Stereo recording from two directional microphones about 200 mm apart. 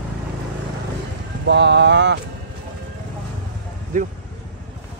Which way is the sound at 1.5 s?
60° right (ahead or behind).